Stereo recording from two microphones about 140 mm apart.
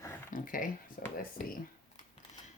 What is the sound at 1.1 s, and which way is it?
Speech, 90° left.